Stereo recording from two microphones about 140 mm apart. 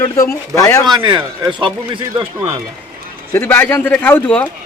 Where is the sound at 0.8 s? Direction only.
30° right (ahead or behind).